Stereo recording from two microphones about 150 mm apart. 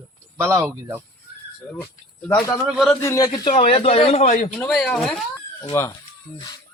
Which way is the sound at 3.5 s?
40° left (ahead or behind).